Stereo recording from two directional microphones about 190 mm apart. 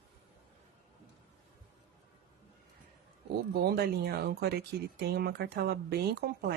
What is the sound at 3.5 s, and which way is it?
Speech, 55° right (ahead or behind).